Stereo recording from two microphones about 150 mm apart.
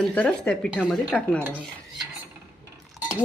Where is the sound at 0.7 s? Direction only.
10° right (ahead or behind).